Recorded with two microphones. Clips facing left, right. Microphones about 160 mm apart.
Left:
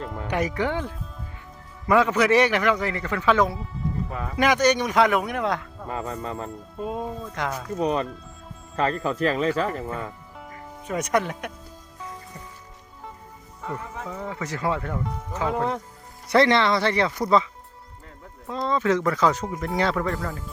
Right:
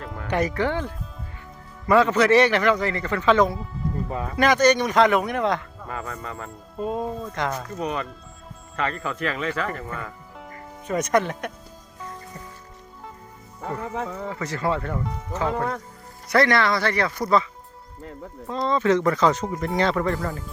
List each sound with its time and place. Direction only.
0.3 s a man's voice: 10° left (ahead or behind)
5.9 s speech: 25° left (ahead or behind)
6.7 s speech: centre (ahead or behind)
7.8 s speech: 30° left (ahead or behind)
10.3 s music: centre (ahead or behind)
14.1 s a man's voice: 5° left (ahead or behind)
16.3 s speech: 25° left (ahead or behind)
18.4 s speech: 5° left (ahead or behind)